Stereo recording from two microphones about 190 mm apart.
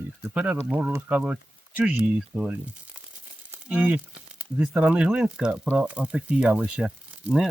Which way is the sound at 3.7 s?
10° right (ahead or behind).